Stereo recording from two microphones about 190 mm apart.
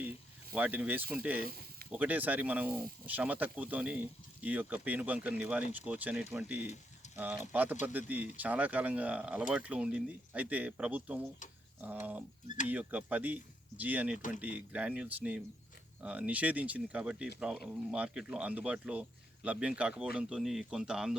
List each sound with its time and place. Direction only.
0.5 s speech: 10° right (ahead or behind)
14.2 s speech: 45° left (ahead or behind)
14.4 s speech: 5° right (ahead or behind)